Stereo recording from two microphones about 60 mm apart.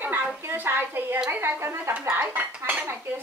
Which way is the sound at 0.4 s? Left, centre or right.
Right.